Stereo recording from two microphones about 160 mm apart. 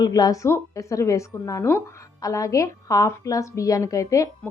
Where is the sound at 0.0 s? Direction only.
25° left (ahead or behind).